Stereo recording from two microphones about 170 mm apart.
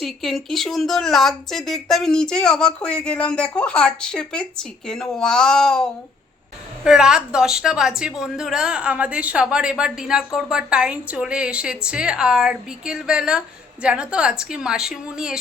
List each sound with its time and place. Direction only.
0.0 s a woman's voice: centre (ahead or behind)
6.8 s a woman's voice: 5° right (ahead or behind)